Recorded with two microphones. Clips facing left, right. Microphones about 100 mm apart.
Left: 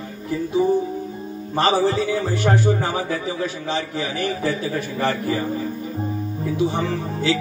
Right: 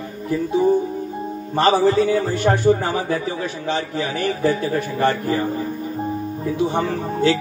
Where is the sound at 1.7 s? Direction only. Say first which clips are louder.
Right 5 dB; 50° right (ahead or behind).